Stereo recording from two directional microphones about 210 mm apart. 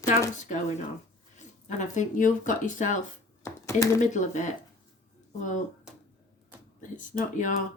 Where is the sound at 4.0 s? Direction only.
35° left (ahead or behind).